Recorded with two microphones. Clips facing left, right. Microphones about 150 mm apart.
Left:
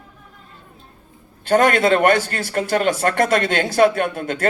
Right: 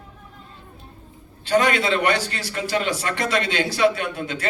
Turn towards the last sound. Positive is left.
turn(degrees=50)  # may be behind; listen again after turning